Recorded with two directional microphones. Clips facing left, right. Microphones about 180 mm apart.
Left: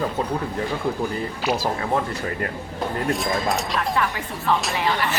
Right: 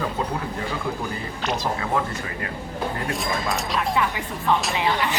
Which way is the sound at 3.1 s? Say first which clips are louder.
Left 3 dB; centre (ahead or behind).